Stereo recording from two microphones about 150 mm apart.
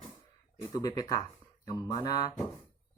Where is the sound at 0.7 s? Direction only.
25° left (ahead or behind).